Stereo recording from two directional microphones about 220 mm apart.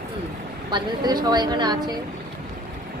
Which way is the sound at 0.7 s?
20° right (ahead or behind).